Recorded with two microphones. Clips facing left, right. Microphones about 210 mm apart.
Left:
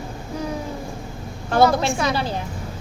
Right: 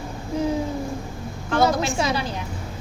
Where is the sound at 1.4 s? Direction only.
35° left (ahead or behind).